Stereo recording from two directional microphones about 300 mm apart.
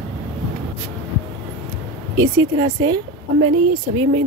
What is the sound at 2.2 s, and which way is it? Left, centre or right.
A woman's voice, centre.